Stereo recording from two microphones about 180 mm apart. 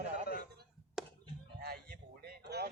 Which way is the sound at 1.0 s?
5° right (ahead or behind).